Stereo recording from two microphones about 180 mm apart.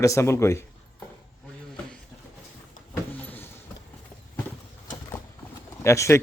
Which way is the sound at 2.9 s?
10° left (ahead or behind).